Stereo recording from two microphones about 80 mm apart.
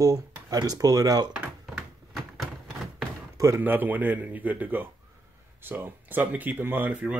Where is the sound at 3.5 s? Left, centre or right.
Right.